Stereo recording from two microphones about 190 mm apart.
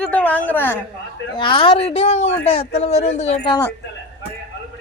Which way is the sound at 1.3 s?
25° left (ahead or behind).